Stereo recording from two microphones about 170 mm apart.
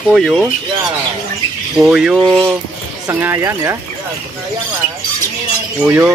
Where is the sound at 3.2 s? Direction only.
15° right (ahead or behind).